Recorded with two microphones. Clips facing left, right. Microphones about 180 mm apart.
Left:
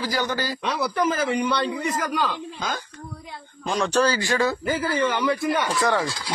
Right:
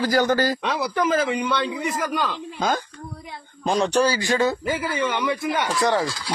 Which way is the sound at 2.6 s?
50° right (ahead or behind).